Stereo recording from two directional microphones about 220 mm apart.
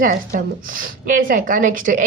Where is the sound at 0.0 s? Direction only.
40° right (ahead or behind).